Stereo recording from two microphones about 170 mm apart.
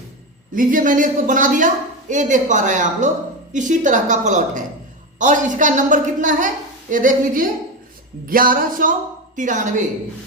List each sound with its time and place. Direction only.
0.5 s a woman's voice: 50° right (ahead or behind)